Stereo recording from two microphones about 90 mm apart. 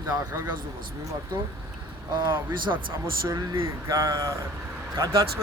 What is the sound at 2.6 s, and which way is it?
Speech, 65° right (ahead or behind).